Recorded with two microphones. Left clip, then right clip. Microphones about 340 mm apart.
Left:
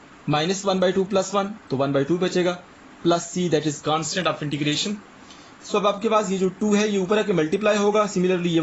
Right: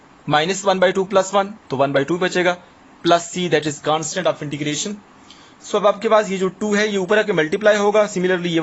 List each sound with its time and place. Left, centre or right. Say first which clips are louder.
0.3 s a man's voice: right 5 dB; right